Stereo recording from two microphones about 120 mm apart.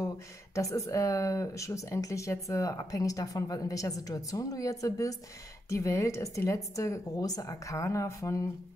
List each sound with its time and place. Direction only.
0.6 s speech: 25° left (ahead or behind)